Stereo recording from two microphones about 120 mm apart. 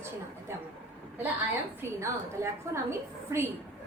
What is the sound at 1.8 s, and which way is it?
A woman's voice, 25° right (ahead or behind).